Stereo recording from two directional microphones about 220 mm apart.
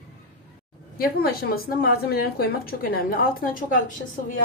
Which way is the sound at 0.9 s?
45° left (ahead or behind).